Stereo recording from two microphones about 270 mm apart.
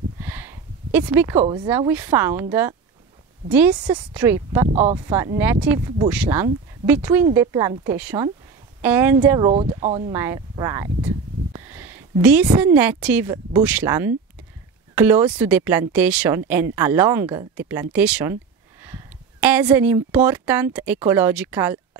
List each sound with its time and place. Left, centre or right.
0.2 s a sound: centre
1.4 s speech: centre
3.4 s speech: centre
4.6 s speech: right
5.0 s speech: centre
9.5 s speech: right
10.1 s a woman's voice: centre
19.4 s speech: centre